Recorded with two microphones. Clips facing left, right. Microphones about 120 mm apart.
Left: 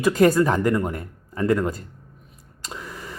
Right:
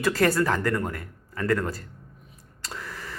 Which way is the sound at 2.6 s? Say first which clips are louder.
Left 2 dB; 15° left (ahead or behind).